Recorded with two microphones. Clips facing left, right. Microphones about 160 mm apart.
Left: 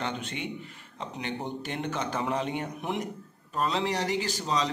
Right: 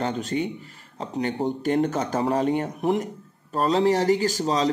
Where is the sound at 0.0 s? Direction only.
40° right (ahead or behind).